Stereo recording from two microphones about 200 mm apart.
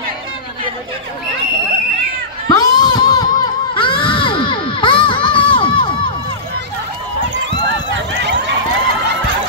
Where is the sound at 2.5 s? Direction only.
20° left (ahead or behind).